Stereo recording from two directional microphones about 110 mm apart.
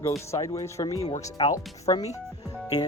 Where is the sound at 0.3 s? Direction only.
30° left (ahead or behind).